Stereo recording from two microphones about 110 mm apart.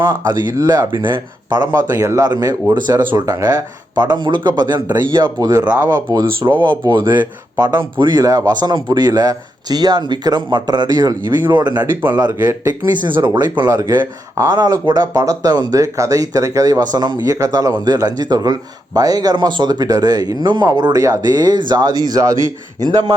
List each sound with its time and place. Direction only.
0.4 s speech: 35° right (ahead or behind)
1.7 s speech: 25° right (ahead or behind)
5.6 s speech: 10° right (ahead or behind)
6.1 s speech: 40° right (ahead or behind)
13.0 s speech: 45° right (ahead or behind)